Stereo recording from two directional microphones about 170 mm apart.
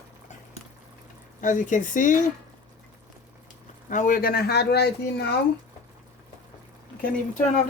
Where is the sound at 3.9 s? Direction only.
50° left (ahead or behind); by 5.3 s 75° left (ahead or behind).